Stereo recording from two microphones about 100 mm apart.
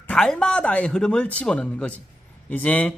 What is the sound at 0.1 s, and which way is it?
Speech, 5° left (ahead or behind).